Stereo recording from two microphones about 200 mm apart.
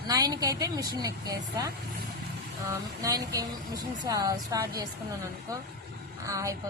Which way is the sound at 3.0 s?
15° right (ahead or behind).